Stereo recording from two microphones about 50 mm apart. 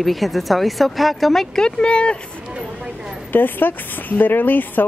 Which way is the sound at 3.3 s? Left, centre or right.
Left.